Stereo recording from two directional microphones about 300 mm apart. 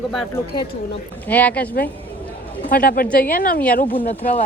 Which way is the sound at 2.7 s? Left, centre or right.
Left.